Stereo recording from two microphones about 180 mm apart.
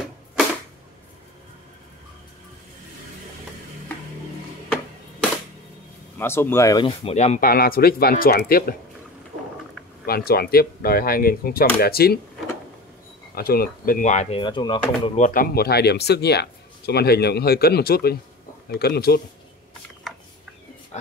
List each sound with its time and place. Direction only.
6.1 s speech: 10° left (ahead or behind); by 7.3 s 35° left (ahead or behind)
7.3 s a man's voice: 55° left (ahead or behind)
10.0 s a man's voice: 60° left (ahead or behind)
13.3 s speech: 55° left (ahead or behind); by 14.8 s 25° left (ahead or behind)
15.0 s a man's voice: 40° left (ahead or behind); by 19.2 s 60° left (ahead or behind)
20.9 s speech: 40° left (ahead or behind)